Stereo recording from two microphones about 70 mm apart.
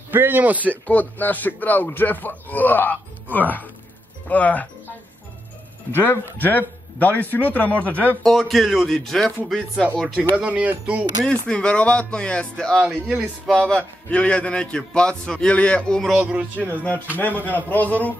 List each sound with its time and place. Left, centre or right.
0.1 s speech: right
0.8 s speech: left
5.9 s speech: left
8.2 s speech: centre
10.3 s speech: centre
11.2 s a man's voice: centre
13.0 s a man's voice: centre
13.5 s a man's voice: centre
14.1 s a man's voice: centre
16.2 s a man's voice: centre
16.8 s speech: left